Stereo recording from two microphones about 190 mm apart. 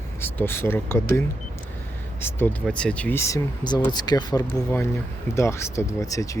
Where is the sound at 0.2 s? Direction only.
10° left (ahead or behind).